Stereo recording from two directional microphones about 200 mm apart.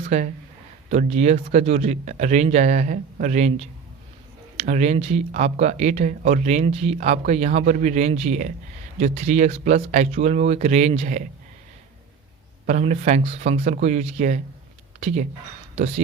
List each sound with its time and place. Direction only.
0.0 s speech: 35° right (ahead or behind)
12.6 s speech: 35° right (ahead or behind)